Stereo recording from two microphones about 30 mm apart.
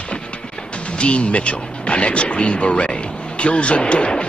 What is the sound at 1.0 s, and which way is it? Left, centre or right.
Speech, left.